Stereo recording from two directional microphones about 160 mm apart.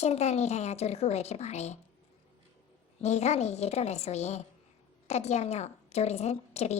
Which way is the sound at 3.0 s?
45° left (ahead or behind).